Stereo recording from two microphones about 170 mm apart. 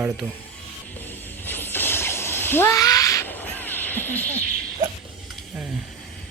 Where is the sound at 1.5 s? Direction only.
10° left (ahead or behind).